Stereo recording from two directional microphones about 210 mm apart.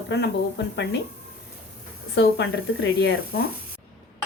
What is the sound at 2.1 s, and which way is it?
Speech, 55° left (ahead or behind).